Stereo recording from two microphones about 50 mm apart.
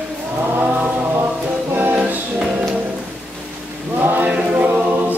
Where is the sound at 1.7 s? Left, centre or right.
Right.